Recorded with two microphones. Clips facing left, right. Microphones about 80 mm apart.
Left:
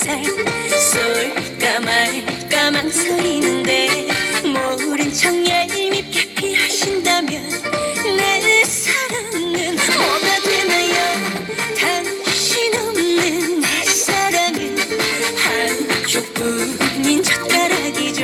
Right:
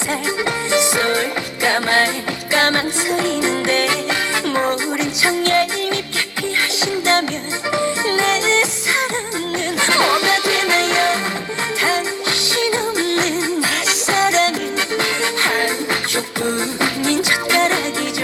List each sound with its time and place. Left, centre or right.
0.7 s music: right
12.5 s music: right
15.5 s music: centre